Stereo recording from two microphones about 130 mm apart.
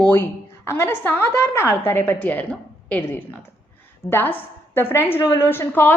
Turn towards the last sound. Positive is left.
turn(degrees=15)  # may be behind; listen again after turning